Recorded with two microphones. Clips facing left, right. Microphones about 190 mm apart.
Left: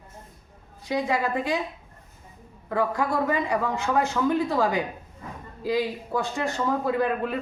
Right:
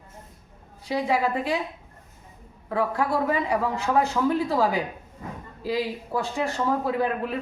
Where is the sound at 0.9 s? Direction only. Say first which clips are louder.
Right 1 dB; 5° right (ahead or behind).